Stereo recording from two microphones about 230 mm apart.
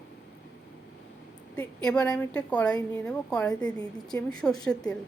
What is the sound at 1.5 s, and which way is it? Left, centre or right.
Speech, centre.